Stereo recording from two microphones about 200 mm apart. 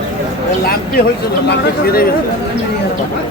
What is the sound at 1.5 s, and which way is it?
Speech, 50° left (ahead or behind).